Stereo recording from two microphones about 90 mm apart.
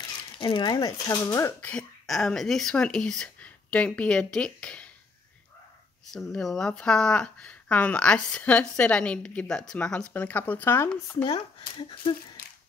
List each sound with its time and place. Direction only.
0.2 s speech: 60° left (ahead or behind); by 1.5 s 35° left (ahead or behind)
1.6 s speech: 15° left (ahead or behind)
2.0 s speech: 5° left (ahead or behind)
6.1 s speech: 5° left (ahead or behind); by 10.9 s 25° left (ahead or behind)
11.2 s speech: 65° left (ahead or behind)